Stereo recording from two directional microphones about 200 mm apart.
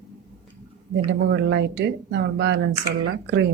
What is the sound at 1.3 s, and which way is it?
Speech, 60° right (ahead or behind).